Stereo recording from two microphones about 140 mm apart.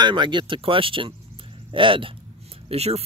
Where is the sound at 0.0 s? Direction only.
35° right (ahead or behind).